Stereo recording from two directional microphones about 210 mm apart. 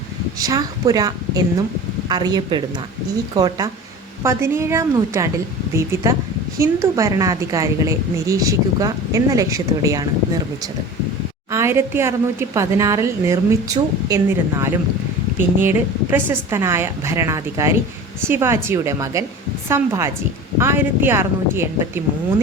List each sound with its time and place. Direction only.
0.3 s a woman's voice: 15° right (ahead or behind)
11.5 s a woman's voice: 10° right (ahead or behind)